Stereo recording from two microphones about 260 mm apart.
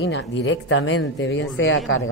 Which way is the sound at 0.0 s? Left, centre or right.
Left.